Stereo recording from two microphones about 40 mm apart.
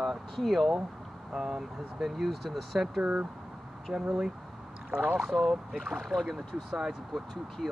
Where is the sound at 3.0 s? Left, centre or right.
Right.